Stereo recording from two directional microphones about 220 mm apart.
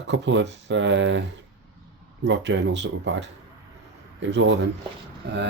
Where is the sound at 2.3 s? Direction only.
55° right (ahead or behind).